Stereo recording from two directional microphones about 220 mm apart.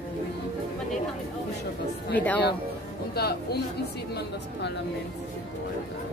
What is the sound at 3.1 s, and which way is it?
Speech, 45° left (ahead or behind).